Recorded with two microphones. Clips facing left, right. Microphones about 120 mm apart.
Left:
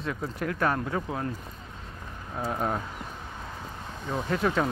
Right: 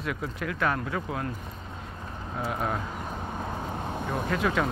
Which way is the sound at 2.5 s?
30° left (ahead or behind).